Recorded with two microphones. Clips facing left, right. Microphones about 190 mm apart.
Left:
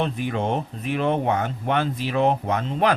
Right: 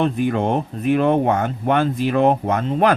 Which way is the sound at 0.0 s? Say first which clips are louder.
Right 6 dB; 50° right (ahead or behind).